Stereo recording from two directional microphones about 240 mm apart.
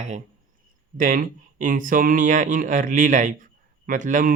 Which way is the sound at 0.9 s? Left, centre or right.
Right.